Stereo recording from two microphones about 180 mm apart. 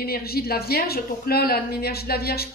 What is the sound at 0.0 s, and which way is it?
Speech, 60° left (ahead or behind).